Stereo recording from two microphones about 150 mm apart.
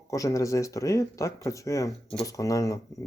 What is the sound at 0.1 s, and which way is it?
Speech, 20° left (ahead or behind).